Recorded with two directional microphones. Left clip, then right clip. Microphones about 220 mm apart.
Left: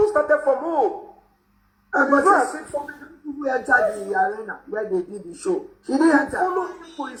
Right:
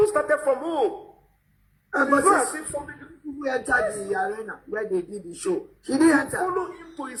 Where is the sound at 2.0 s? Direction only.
35° right (ahead or behind).